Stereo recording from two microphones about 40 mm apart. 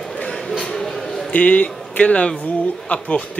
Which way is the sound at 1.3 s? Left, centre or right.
Left.